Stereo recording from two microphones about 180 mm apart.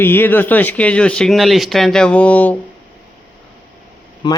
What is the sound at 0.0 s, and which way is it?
Speech, 10° left (ahead or behind).